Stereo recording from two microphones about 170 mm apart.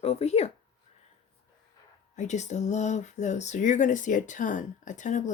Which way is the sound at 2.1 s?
45° left (ahead or behind).